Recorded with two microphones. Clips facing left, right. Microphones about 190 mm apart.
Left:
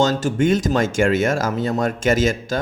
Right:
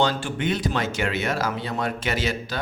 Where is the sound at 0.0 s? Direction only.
45° left (ahead or behind).